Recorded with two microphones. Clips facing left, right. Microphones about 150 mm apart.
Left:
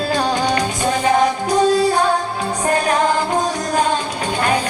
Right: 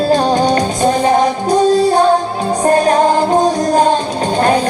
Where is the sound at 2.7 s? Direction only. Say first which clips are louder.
Right 6 dB; 40° right (ahead or behind).